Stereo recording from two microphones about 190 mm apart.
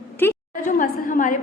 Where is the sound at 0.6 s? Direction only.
45° left (ahead or behind).